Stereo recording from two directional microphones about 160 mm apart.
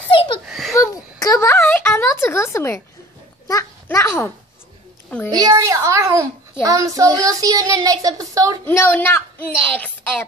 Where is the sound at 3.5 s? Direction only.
20° left (ahead or behind).